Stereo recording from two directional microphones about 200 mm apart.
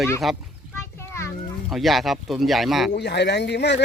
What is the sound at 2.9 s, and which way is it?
Speech, 55° left (ahead or behind).